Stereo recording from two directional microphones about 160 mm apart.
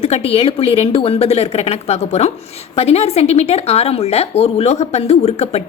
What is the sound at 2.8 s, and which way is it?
Speech, 40° left (ahead or behind).